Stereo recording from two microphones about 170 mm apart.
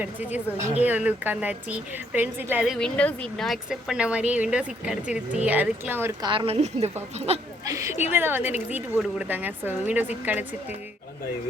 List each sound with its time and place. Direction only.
0.0 s speech: 10° right (ahead or behind)
2.7 s speech: 5° left (ahead or behind); by 6.1 s 15° right (ahead or behind)
6.2 s a woman's voice: 30° right (ahead or behind)
7.6 s speech: 20° right (ahead or behind)